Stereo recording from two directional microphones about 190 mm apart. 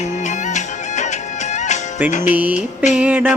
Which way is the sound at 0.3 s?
40° left (ahead or behind).